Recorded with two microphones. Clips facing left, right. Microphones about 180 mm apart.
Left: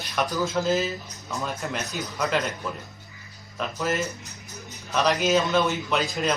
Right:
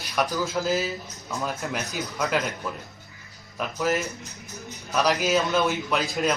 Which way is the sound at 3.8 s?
Centre (ahead or behind).